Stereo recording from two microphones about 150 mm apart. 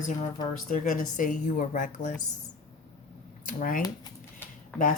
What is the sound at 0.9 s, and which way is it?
Speech, 60° left (ahead or behind).